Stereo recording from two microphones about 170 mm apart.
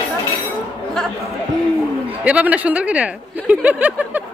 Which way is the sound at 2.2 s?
10° right (ahead or behind).